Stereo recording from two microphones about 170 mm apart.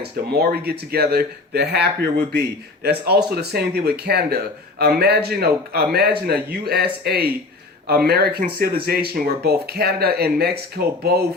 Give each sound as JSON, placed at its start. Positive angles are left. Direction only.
{"t": 0.0, "sound": "speech", "side_deg": -70}